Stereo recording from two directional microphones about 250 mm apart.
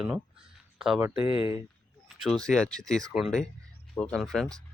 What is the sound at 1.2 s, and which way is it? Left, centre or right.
Speech, left.